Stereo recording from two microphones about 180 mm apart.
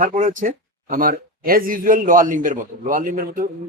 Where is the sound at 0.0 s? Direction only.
45° right (ahead or behind).